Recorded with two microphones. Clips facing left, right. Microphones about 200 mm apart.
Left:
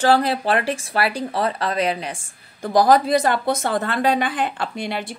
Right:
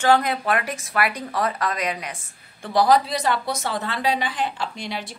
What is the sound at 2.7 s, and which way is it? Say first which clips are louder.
A woman's voice: left 3 dB; 45° left (ahead or behind).